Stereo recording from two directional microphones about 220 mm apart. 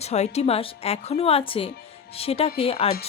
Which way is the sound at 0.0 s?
30° left (ahead or behind).